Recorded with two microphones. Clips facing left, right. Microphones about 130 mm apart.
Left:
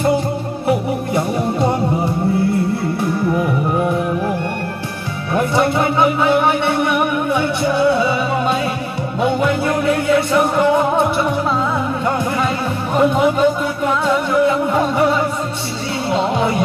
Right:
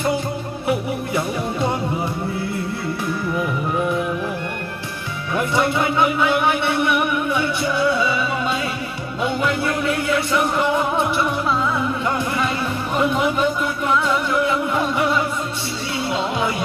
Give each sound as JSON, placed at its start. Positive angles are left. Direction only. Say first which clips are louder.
{"t": 0.7, "sound": "music", "louder": "left 4 dB", "side_deg": 35}
{"t": 5.3, "sound": "music", "louder": "left 4 dB", "side_deg": 35}
{"t": 9.8, "sound": "music", "louder": "left 7 dB", "side_deg": 35}
{"t": 12.9, "sound": "a sound", "louder": "left 6 dB", "side_deg": 40}
{"t": 14.0, "sound": "music", "louder": "left 5 dB", "side_deg": 35}